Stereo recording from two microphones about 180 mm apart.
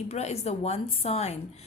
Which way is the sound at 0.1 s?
35° left (ahead or behind).